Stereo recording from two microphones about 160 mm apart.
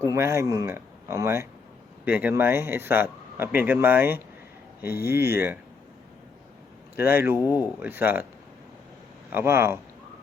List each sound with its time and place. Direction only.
0.0 s speech: 20° right (ahead or behind)
6.9 s speech: 15° right (ahead or behind)
9.3 s speech: 15° right (ahead or behind)